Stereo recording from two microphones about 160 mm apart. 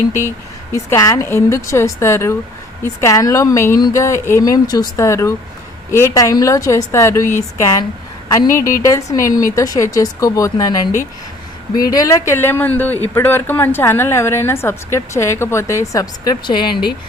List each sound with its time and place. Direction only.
0.3 s a woman's voice: 15° left (ahead or behind)
8.8 s a woman's voice: 20° left (ahead or behind)